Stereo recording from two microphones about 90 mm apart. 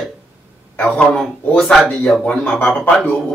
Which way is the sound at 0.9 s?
5° left (ahead or behind).